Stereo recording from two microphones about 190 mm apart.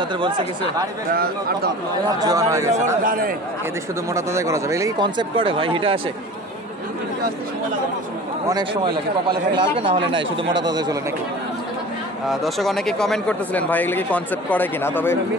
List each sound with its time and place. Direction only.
1.1 s speech: 55° right (ahead or behind)
2.1 s speech: 20° right (ahead or behind)
3.0 s speech: 45° right (ahead or behind)
4.1 s speech: 15° right (ahead or behind)
8.5 s speech: 20° right (ahead or behind)
12.3 s speech: centre (ahead or behind)